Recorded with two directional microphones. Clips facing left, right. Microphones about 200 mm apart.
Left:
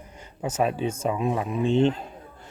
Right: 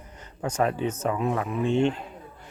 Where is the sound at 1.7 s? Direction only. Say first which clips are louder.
Left 3 dB; 35° left (ahead or behind).